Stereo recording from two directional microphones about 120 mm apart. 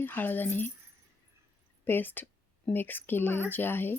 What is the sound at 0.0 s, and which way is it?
Speech, 15° left (ahead or behind).